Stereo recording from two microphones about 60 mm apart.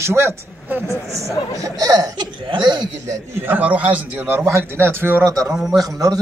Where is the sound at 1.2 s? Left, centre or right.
Right.